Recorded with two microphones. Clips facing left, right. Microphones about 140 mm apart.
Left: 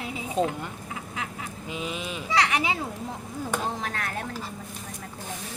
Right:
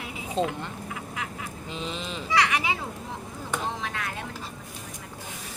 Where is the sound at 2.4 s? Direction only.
30° left (ahead or behind).